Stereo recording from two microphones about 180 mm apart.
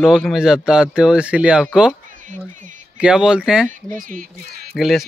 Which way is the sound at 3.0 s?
5° right (ahead or behind).